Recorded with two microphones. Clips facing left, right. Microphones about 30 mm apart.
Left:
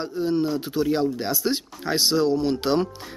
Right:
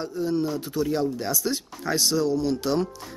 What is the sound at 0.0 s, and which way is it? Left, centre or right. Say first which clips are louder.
Speech: left 2 dB; left.